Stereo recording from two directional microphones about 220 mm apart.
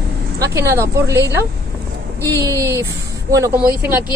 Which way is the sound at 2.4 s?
15° right (ahead or behind).